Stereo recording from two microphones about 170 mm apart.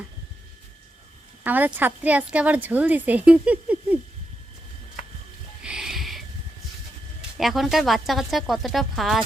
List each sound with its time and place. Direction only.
1.5 s a woman's voice: 10° right (ahead or behind)
5.6 s a sound: 5° right (ahead or behind)
7.3 s speech: centre (ahead or behind)